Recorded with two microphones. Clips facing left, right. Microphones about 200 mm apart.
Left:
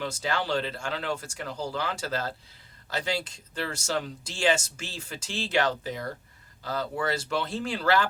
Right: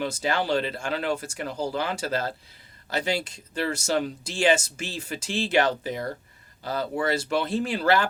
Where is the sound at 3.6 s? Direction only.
15° right (ahead or behind).